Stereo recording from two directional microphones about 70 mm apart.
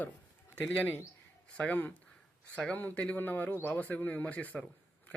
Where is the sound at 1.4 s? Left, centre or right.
Centre.